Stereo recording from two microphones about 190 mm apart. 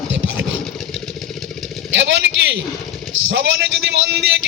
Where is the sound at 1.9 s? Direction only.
75° right (ahead or behind).